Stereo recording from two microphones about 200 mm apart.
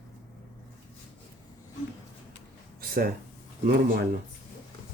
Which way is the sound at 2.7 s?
50° right (ahead or behind).